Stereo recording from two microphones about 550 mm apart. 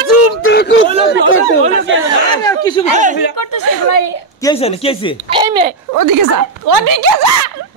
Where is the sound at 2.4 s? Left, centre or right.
Centre.